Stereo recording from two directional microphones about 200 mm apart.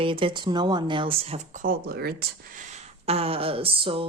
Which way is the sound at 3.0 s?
30° right (ahead or behind).